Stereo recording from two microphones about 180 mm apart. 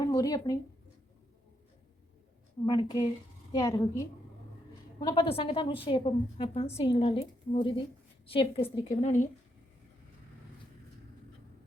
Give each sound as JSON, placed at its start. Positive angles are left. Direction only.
{"t": 0.0, "sound": "speech", "side_deg": 20}
{"t": 2.6, "sound": "a woman's voice", "side_deg": 25}